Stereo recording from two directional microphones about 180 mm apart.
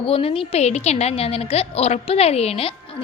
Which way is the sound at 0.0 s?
30° left (ahead or behind).